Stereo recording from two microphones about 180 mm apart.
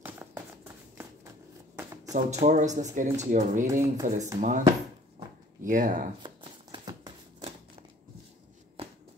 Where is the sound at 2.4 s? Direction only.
40° right (ahead or behind).